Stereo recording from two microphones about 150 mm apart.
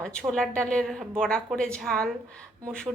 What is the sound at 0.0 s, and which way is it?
A woman's voice, 5° left (ahead or behind).